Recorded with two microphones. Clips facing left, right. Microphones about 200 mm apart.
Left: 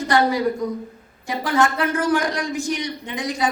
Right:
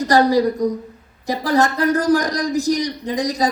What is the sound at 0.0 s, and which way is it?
A woman's voice, 35° right (ahead or behind).